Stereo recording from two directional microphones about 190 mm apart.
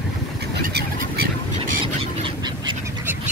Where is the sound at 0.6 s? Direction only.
55° right (ahead or behind).